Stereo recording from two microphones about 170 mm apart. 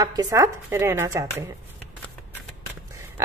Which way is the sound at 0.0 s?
20° right (ahead or behind).